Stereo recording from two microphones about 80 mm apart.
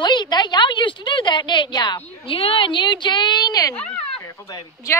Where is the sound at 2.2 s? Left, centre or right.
Left.